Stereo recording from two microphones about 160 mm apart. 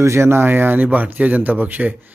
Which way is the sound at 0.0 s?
15° right (ahead or behind).